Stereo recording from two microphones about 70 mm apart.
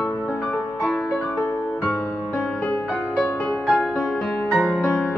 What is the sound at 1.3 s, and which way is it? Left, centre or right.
Music, left.